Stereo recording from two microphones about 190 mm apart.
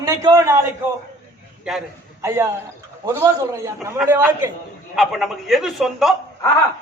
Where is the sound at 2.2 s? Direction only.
15° right (ahead or behind).